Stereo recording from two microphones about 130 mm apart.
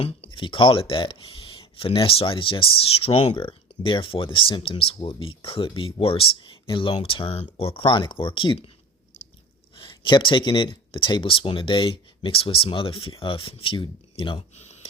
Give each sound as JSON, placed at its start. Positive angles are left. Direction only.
{"t": 0.0, "sound": "speech", "side_deg": 50}
{"t": 9.7, "sound": "speech", "side_deg": 40}
{"t": 14.5, "sound": "a sound", "side_deg": 55}